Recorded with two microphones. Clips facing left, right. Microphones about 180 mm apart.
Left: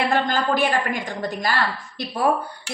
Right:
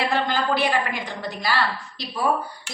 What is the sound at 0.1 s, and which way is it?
A woman's voice, 50° left (ahead or behind).